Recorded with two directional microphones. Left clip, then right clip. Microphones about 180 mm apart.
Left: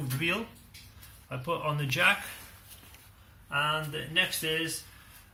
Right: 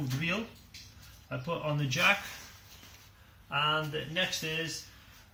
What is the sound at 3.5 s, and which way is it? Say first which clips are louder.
Speech: even; 45° right (ahead or behind).